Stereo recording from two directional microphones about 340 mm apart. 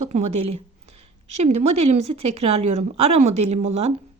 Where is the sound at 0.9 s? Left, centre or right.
Right.